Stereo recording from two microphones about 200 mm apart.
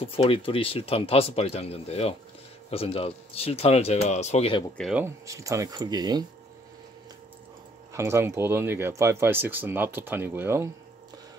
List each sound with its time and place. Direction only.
0.0 s speech: 30° left (ahead or behind)
4.7 s speech: centre (ahead or behind)
5.0 s speech: 15° right (ahead or behind)
7.9 s speech: 15° right (ahead or behind)